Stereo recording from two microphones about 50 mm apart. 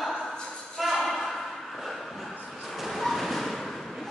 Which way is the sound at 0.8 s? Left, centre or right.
Centre.